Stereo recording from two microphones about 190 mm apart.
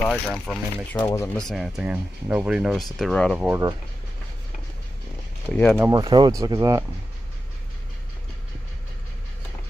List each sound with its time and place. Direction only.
0.1 s speech: centre (ahead or behind)
0.9 s speech: 15° left (ahead or behind)
1.4 s speech: centre (ahead or behind)
3.4 s speech: 15° right (ahead or behind)
5.5 s speech: 5° left (ahead or behind)
5.8 s speech: 20° right (ahead or behind)